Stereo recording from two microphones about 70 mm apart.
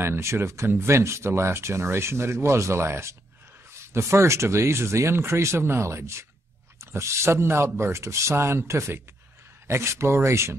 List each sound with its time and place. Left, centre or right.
0.0 s speech: right